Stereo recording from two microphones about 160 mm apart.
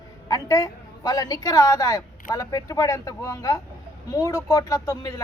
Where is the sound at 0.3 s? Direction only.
20° left (ahead or behind).